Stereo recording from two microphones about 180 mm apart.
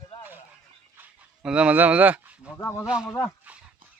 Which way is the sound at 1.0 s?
5° right (ahead or behind).